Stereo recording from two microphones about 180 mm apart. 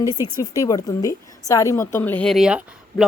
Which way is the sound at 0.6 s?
20° left (ahead or behind).